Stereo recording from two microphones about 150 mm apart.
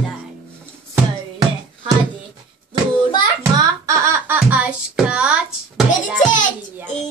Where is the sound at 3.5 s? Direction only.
20° right (ahead or behind); by 5.8 s 5° right (ahead or behind).